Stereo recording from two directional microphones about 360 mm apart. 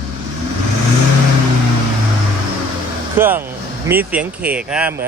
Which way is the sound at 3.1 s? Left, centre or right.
Centre.